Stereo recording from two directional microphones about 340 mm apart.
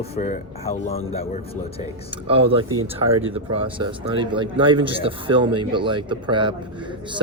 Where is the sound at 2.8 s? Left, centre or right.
Right.